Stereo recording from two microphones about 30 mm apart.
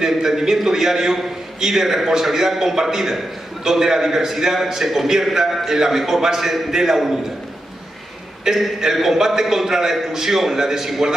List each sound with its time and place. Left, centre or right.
0.0 s a man's voice: centre
8.5 s a man's voice: right